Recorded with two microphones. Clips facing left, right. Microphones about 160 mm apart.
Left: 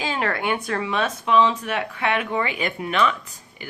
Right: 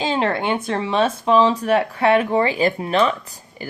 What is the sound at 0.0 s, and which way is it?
A woman's voice, 25° right (ahead or behind).